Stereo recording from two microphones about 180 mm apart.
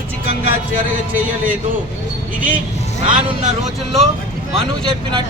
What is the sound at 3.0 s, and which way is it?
Speech, 40° right (ahead or behind).